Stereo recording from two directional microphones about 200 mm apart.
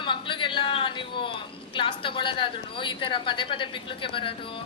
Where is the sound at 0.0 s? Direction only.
25° left (ahead or behind).